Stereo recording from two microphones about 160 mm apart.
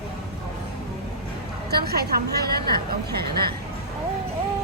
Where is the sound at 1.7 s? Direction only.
80° right.